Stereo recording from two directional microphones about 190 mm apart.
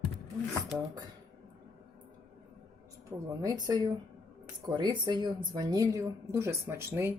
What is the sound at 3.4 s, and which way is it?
A woman's voice, 20° right (ahead or behind).